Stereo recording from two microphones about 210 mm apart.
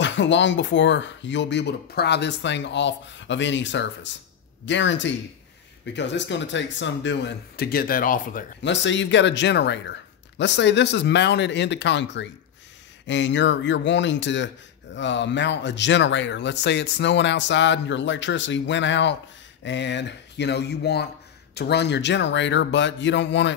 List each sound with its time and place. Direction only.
0.0 s speech: 60° left (ahead or behind); by 8.5 s 40° left (ahead or behind)
8.6 s speech: 60° left (ahead or behind)